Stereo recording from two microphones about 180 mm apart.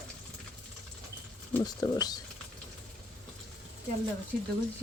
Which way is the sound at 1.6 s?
20° left (ahead or behind).